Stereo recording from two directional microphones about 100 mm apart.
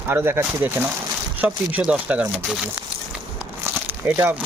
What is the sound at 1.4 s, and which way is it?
Speech, 10° right (ahead or behind).